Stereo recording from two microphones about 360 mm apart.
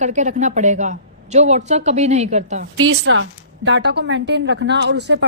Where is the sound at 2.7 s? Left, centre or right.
Right.